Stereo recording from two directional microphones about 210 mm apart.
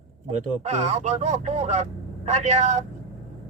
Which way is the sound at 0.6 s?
30° right (ahead or behind).